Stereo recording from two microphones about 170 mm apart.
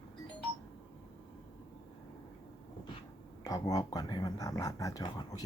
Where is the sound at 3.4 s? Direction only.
20° left (ahead or behind).